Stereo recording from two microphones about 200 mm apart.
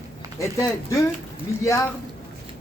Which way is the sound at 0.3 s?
15° left (ahead or behind).